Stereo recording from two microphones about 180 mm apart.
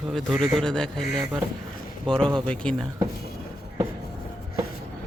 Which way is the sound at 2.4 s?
5° left (ahead or behind).